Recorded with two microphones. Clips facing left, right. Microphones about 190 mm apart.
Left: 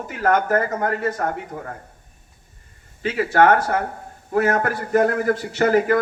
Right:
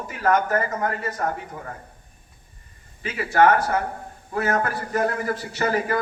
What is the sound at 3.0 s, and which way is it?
A man's voice, 65° left (ahead or behind).